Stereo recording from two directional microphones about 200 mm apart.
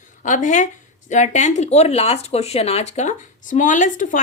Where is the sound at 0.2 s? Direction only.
40° left (ahead or behind).